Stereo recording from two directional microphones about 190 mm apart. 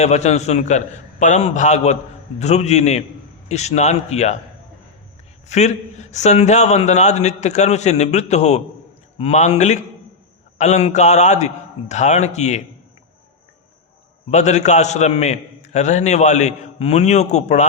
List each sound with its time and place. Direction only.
0.0 s a man's voice: 35° left (ahead or behind)
5.5 s a man's voice: 35° left (ahead or behind)
14.3 s a man's voice: 35° left (ahead or behind)